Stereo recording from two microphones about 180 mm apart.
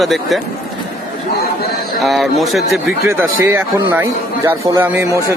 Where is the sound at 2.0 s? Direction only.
Centre (ahead or behind).